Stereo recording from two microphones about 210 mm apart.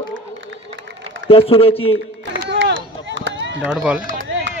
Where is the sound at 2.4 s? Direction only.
55° right (ahead or behind).